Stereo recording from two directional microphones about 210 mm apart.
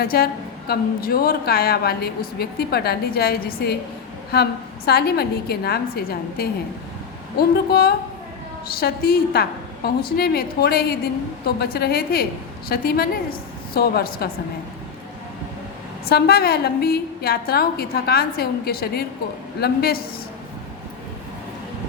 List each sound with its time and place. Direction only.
0.0 s a woman's voice: 45° left (ahead or behind)
4.9 s a woman's voice: 50° left (ahead or behind)
16.0 s a woman's voice: 50° left (ahead or behind)